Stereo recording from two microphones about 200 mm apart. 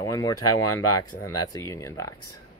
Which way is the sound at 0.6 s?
90° left.